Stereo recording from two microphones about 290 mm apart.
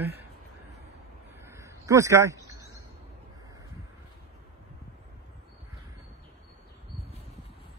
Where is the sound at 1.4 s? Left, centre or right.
Centre.